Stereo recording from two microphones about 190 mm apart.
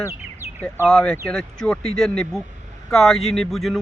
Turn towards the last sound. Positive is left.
turn(degrees=0)  # may be behind; listen again after turning